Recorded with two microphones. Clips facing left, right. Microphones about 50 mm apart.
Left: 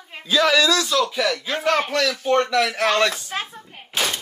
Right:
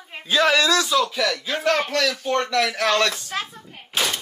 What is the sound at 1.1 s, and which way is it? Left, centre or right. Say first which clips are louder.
A man's voice: left 1 dB; centre.